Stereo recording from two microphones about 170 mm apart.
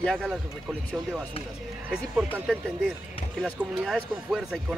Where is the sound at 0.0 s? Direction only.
Centre (ahead or behind).